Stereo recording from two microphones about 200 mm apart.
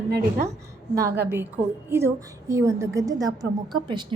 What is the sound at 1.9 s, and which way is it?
A woman's voice, 15° right (ahead or behind).